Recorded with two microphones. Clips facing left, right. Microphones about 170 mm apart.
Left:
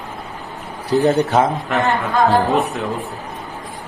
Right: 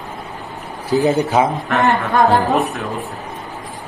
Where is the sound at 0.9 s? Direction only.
Centre (ahead or behind).